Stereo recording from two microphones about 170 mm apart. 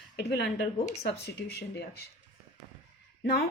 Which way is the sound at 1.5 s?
70° left (ahead or behind).